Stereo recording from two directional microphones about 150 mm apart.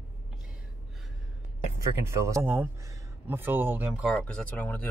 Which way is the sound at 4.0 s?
5° left (ahead or behind).